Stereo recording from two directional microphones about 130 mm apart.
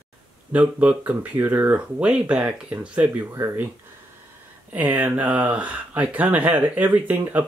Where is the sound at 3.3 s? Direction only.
20° right (ahead or behind).